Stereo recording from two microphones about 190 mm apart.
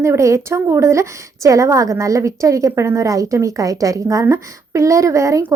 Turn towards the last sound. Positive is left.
turn(degrees=-15)  # may be behind; listen again after turning